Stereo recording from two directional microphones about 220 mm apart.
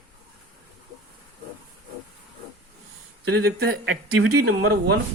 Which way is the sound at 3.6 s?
45° right (ahead or behind).